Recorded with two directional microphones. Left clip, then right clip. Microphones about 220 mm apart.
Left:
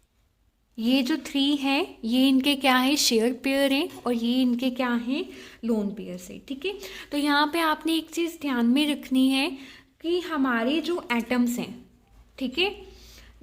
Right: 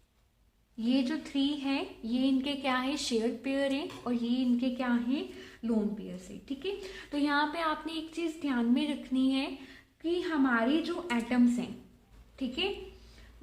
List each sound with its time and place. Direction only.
0.8 s speech: 50° left (ahead or behind)